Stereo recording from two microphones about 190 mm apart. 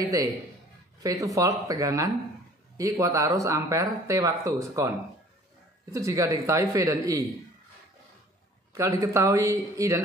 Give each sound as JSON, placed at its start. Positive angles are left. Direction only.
{"t": 0.0, "sound": "speech", "side_deg": -15}
{"t": 8.7, "sound": "speech", "side_deg": -15}